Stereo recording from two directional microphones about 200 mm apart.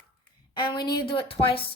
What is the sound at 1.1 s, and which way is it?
Speech, 25° left (ahead or behind).